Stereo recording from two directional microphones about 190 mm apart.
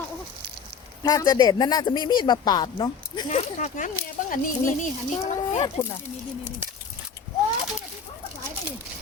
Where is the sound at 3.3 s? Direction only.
35° left (ahead or behind).